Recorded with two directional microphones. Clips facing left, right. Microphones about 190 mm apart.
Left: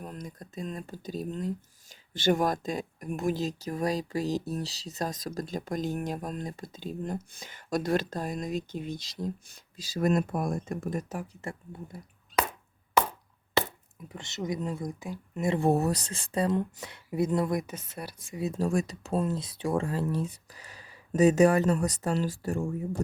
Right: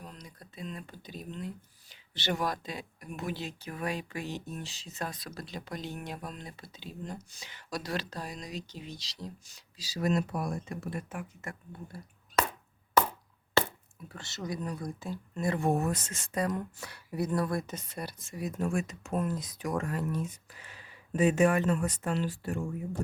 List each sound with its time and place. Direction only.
0.0 s speech: 50° left (ahead or behind)
14.1 s speech: 20° left (ahead or behind)
15.6 s speech: 35° left (ahead or behind); by 18.3 s 5° left (ahead or behind)
18.3 s speech: 30° left (ahead or behind)